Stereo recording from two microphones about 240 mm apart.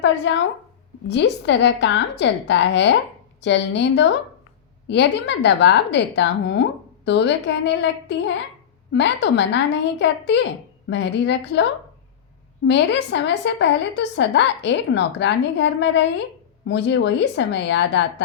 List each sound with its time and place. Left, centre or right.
0.3 s a woman's voice: left
12.6 s a woman's voice: left